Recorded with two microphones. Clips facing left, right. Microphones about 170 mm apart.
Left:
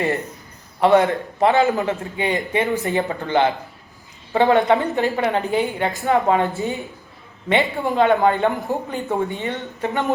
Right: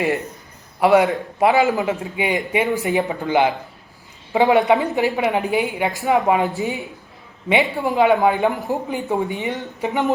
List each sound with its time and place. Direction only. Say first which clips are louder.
0.0 s a man's voice: right 1 dB; centre (ahead or behind)